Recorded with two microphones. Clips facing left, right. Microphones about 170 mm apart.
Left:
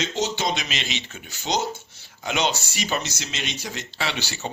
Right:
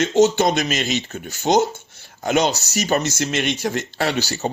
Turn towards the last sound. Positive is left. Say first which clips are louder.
# right 7 dB
turn(degrees=-40)  # may be behind; listen again after turning